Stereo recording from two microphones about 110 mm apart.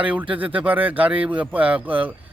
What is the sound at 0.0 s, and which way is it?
Speech, 15° right (ahead or behind).